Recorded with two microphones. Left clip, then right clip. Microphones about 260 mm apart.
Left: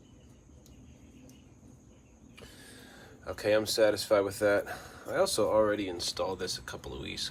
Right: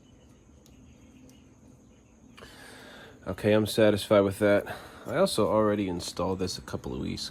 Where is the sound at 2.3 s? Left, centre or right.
Right.